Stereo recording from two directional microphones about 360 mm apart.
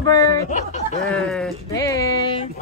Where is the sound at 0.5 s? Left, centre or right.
Centre.